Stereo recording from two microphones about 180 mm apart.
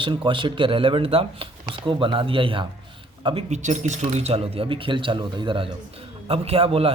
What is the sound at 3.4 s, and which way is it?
Speech, 40° right (ahead or behind).